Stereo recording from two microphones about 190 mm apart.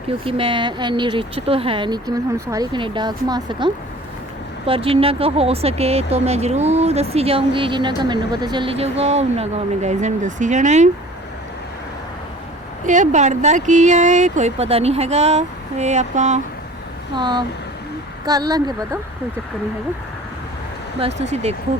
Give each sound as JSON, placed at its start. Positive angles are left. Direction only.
{"t": 0.3, "sound": "speech", "side_deg": -30}
{"t": 12.8, "sound": "speech", "side_deg": -40}
{"t": 17.2, "sound": "speech", "side_deg": -25}
{"t": 21.2, "sound": "speech", "side_deg": -35}